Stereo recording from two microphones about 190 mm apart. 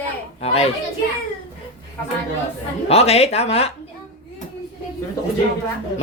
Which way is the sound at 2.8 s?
35° left (ahead or behind).